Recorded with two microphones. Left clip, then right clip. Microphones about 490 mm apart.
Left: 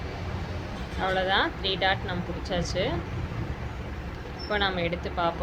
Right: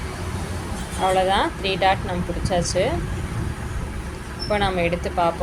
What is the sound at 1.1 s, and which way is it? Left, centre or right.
Speech, left.